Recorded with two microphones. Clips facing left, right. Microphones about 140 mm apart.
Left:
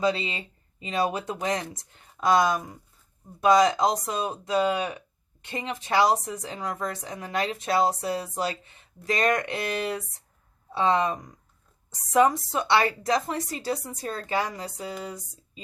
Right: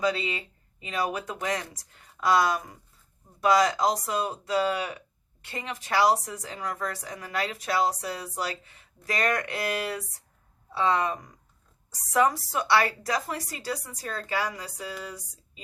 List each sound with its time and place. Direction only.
0.0 s a woman's voice: 25° left (ahead or behind)